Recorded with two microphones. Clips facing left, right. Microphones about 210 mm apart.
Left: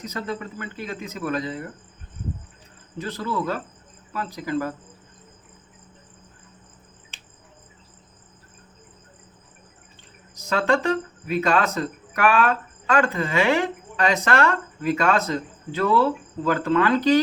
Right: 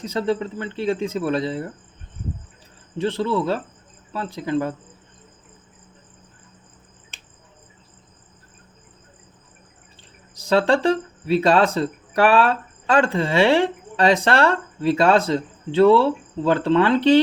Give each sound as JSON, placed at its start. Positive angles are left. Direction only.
{"t": 0.0, "sound": "speech", "side_deg": -30}
{"t": 3.0, "sound": "speech", "side_deg": -25}
{"t": 10.3, "sound": "speech", "side_deg": -30}